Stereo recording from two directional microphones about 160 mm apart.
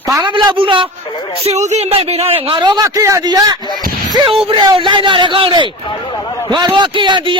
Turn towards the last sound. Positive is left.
turn(degrees=-30)  # may be behind; listen again after turning